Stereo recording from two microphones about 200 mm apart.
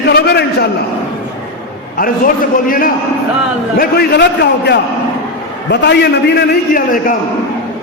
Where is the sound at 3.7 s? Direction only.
50° left (ahead or behind).